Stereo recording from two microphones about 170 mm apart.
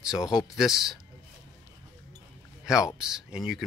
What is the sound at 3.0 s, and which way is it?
Speech, 5° right (ahead or behind).